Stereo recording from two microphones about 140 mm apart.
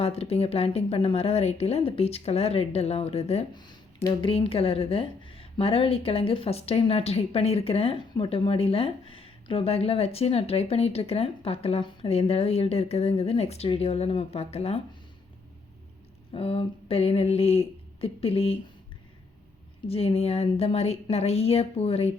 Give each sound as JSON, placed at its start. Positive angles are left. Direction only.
{"t": 0.0, "sound": "speech", "side_deg": 45}
{"t": 3.5, "sound": "speech", "side_deg": 30}
{"t": 16.3, "sound": "speech", "side_deg": 45}
{"t": 19.9, "sound": "speech", "side_deg": 45}